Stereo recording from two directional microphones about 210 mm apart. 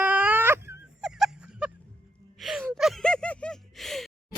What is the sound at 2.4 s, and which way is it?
Gasp, centre (ahead or behind).